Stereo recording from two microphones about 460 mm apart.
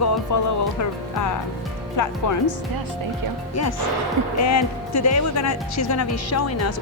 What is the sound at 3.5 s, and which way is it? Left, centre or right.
Speech, left.